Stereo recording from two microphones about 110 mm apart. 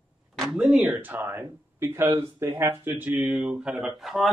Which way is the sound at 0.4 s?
5° right (ahead or behind).